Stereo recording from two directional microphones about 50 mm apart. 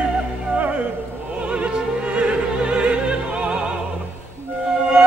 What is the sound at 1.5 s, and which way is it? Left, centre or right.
Opera, right.